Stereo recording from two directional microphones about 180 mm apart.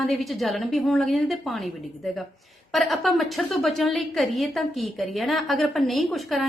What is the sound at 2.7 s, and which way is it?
A woman's voice, centre (ahead or behind).